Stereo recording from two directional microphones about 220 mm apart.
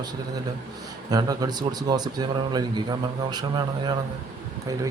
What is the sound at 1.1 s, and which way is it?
Speech, 15° right (ahead or behind).